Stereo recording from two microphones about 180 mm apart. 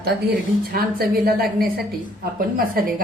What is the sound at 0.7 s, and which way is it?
A woman's voice, 55° right (ahead or behind).